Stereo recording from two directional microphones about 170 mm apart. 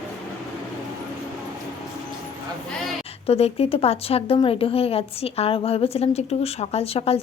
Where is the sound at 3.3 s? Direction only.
35° left (ahead or behind).